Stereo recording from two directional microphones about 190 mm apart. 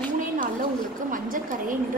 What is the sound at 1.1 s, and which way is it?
Speech, 45° right (ahead or behind).